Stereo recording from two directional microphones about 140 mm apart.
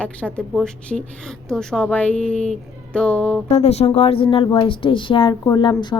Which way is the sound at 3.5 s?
50° left (ahead or behind).